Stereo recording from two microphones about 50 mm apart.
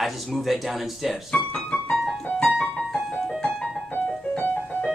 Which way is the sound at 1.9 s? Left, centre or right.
Centre.